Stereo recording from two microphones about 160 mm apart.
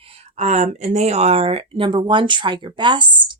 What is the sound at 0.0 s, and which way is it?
Speech, 40° right (ahead or behind).